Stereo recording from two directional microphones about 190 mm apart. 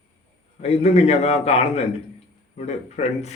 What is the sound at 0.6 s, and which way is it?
A man's voice, 35° left (ahead or behind).